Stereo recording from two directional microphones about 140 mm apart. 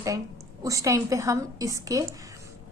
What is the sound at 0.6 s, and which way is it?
A woman's voice, 25° right (ahead or behind).